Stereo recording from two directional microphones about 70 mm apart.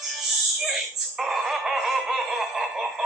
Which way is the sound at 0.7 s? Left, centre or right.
Centre.